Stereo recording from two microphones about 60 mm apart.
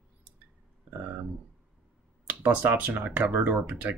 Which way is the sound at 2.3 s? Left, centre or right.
Right.